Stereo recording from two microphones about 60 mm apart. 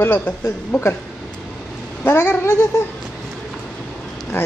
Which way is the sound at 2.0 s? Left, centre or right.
Left.